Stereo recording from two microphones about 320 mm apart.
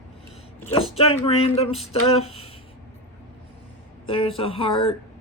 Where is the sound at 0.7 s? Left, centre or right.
Centre.